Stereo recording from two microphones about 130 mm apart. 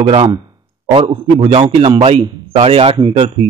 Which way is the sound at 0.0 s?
45° right (ahead or behind).